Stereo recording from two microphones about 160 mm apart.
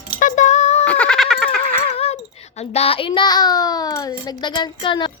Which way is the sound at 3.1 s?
25° left (ahead or behind).